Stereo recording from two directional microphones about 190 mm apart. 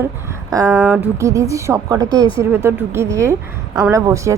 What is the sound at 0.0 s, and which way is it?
A woman's voice, 15° right (ahead or behind).